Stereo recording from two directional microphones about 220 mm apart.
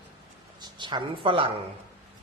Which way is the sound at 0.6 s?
20° right (ahead or behind).